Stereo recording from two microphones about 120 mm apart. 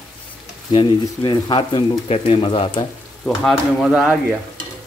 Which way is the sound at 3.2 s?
5° left (ahead or behind).